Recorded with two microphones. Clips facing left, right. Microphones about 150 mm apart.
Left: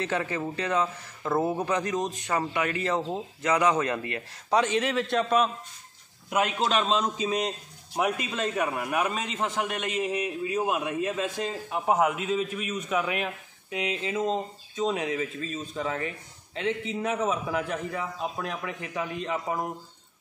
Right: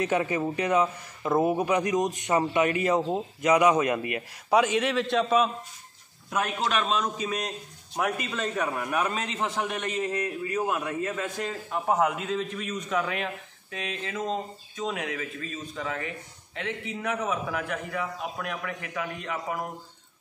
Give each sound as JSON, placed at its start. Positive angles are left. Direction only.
{"t": 0.0, "sound": "a man's voice", "side_deg": -15}
{"t": 6.3, "sound": "a man's voice", "side_deg": 15}
{"t": 6.7, "sound": "a man's voice", "side_deg": 30}